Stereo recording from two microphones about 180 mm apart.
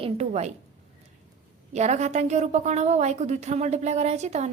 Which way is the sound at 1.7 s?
40° right (ahead or behind).